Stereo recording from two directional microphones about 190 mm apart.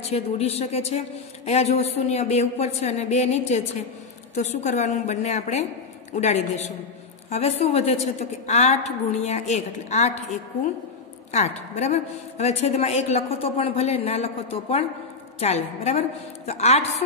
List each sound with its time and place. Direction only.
0.1 s a woman's voice: 35° left (ahead or behind)
11.3 s a woman's voice: 35° left (ahead or behind)